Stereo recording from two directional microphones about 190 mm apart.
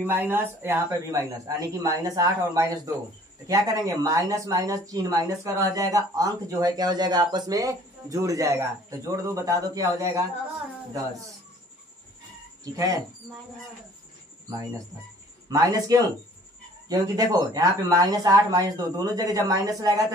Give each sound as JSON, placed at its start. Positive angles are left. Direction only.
{"t": 0.0, "sound": "speech", "side_deg": -10}
{"t": 12.6, "sound": "speech", "side_deg": -20}
{"t": 15.5, "sound": "speech", "side_deg": -20}